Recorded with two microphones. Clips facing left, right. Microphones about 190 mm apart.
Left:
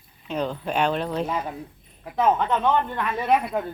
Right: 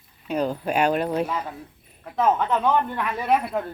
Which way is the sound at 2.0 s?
10° left (ahead or behind).